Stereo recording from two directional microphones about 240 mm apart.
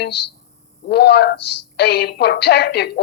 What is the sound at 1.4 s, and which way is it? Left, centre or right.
Speech, left.